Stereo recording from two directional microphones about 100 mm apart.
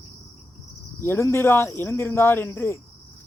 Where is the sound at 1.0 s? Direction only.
25° left (ahead or behind).